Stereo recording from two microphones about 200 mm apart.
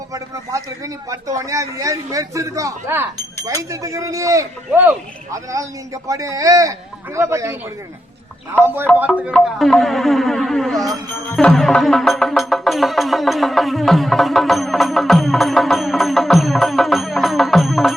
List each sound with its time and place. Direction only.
1.4 s speech: 15° right (ahead or behind)
8.6 s speech: 10° right (ahead or behind)
9.3 s speech: centre (ahead or behind)
11.3 s music: centre (ahead or behind)